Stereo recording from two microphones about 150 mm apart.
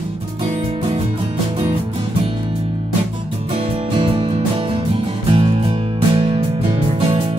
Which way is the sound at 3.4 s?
40° right (ahead or behind).